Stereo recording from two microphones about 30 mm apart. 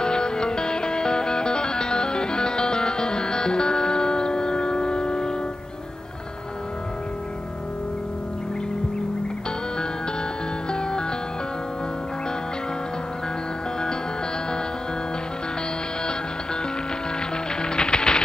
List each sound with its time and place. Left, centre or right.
0.0 s music: left
10.7 s music: left
17.6 s music: left